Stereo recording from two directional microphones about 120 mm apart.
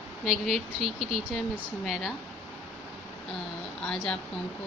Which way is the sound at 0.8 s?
55° right (ahead or behind).